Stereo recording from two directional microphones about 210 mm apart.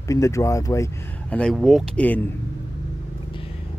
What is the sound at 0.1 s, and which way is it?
Speech, 15° left (ahead or behind).